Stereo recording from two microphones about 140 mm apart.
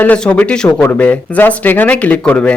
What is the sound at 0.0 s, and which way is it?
A man's voice, 10° left (ahead or behind).